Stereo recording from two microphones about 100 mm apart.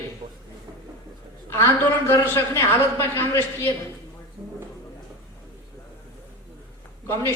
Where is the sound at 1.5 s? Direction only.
25° left (ahead or behind).